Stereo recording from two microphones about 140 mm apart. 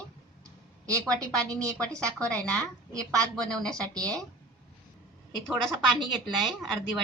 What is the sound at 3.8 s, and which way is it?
Speech, 25° right (ahead or behind).